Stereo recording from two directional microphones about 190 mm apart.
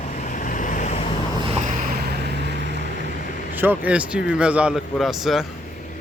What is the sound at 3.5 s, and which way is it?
Speech, 10° right (ahead or behind).